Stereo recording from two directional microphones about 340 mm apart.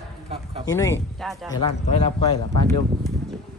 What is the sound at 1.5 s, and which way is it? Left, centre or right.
A man's voice, centre.